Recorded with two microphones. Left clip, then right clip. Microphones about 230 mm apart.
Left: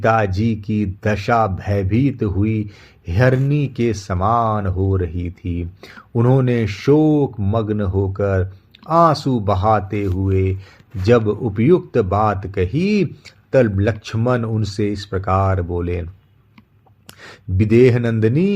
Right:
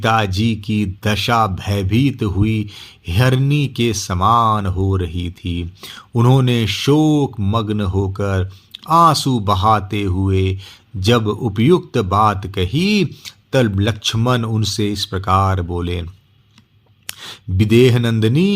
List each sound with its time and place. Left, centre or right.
0.0 s speech: right
17.2 s speech: right